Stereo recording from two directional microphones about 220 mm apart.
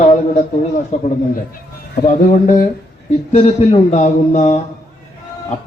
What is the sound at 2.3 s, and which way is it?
Speech, 35° left (ahead or behind).